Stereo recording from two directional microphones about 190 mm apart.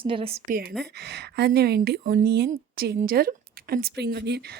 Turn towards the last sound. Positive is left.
turn(degrees=-60)  # may be behind; listen again after turning